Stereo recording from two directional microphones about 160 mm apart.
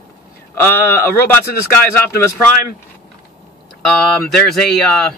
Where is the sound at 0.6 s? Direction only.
15° left (ahead or behind).